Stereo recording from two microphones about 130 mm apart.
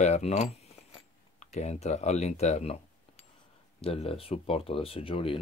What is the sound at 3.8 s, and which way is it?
Speech, 50° left (ahead or behind).